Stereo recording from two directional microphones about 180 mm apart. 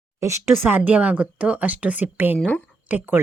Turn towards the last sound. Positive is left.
turn(degrees=-10)  # may be behind; listen again after turning